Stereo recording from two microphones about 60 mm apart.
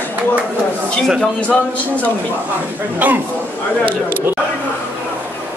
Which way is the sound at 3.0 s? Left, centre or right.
Right.